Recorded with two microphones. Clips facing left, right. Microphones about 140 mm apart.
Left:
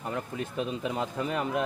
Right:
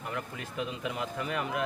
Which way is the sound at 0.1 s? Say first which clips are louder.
Left 5 dB; 30° left (ahead or behind).